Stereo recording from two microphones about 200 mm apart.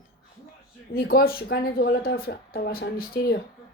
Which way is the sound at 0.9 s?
50° left (ahead or behind).